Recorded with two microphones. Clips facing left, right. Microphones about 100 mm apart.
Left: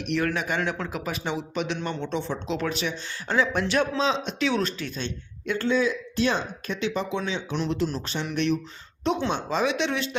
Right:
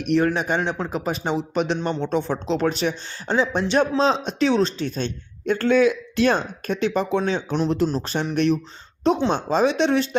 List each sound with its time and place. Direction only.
0.0 s speech: 40° right (ahead or behind)
2.5 s speech: 35° right (ahead or behind)
5.6 s speech: 65° right (ahead or behind); by 10.2 s 40° right (ahead or behind)